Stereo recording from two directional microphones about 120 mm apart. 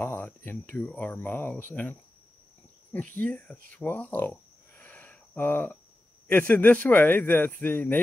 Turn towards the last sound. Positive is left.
turn(degrees=15)  # may be behind; listen again after turning